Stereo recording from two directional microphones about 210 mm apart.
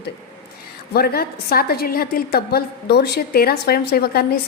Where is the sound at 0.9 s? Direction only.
45° left (ahead or behind).